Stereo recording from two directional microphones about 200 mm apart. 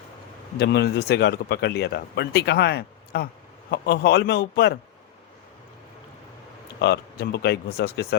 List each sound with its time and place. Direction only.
0.6 s speech: 55° left (ahead or behind)
6.8 s speech: 55° left (ahead or behind)